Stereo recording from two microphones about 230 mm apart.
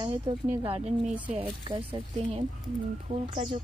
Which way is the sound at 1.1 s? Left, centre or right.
Centre.